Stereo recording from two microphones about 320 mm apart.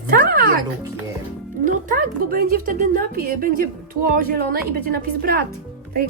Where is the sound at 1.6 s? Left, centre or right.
Right.